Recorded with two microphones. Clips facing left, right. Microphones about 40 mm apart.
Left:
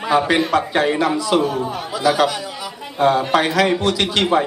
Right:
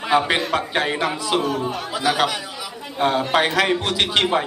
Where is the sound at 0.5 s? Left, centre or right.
Centre.